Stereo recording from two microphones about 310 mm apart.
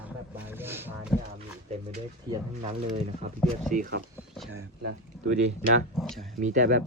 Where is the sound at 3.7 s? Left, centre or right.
Right.